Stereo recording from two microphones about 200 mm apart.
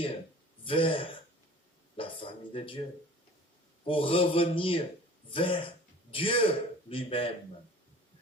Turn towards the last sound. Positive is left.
turn(degrees=25)  # may be behind; listen again after turning